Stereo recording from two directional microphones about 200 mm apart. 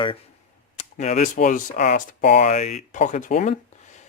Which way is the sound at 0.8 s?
35° left (ahead or behind).